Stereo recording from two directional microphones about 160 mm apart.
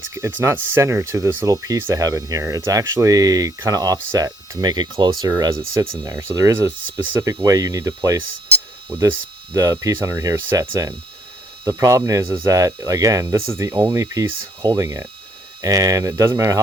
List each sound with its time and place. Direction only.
0.1 s speech: 15° right (ahead or behind)
9.5 s speech: 20° right (ahead or behind)